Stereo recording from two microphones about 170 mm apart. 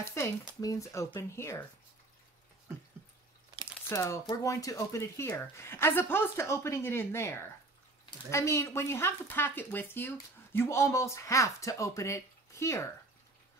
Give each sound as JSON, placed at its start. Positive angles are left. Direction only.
{"t": 0.0, "sound": "speech", "side_deg": 15}
{"t": 3.9, "sound": "speech", "side_deg": 15}